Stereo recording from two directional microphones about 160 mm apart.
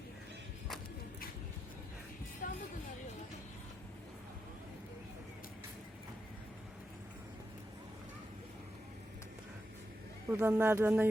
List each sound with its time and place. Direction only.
2.4 s music: 60° left (ahead or behind)
10.2 s speech: 15° right (ahead or behind)